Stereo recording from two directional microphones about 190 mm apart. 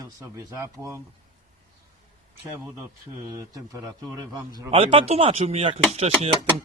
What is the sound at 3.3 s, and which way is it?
Speech, 20° right (ahead or behind).